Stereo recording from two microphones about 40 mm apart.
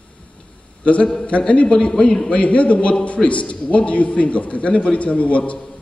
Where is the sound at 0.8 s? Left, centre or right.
Left.